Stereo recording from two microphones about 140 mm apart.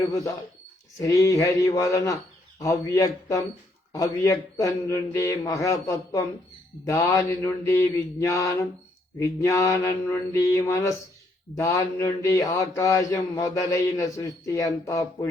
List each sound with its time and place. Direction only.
0.0 s mantra: 20° left (ahead or behind)